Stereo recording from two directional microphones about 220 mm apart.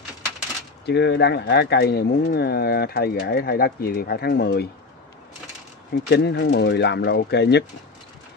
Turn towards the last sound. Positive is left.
turn(degrees=50)  # may be behind; listen again after turning